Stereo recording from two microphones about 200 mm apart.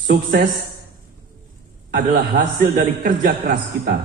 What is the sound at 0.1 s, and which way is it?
Speech, 45° right (ahead or behind).